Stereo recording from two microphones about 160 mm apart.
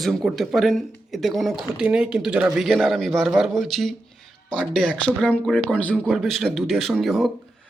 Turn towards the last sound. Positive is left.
turn(degrees=0)  # may be behind; listen again after turning